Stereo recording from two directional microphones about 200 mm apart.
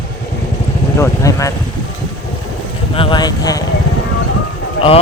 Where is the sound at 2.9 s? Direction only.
25° left (ahead or behind).